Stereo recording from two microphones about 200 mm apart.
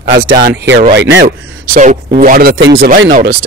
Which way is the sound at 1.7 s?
40° right (ahead or behind).